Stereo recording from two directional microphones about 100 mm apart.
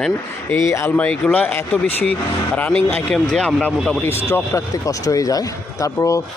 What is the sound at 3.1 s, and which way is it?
Speech, 10° left (ahead or behind).